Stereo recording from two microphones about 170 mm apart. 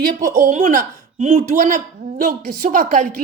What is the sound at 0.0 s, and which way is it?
Speech, 50° right (ahead or behind).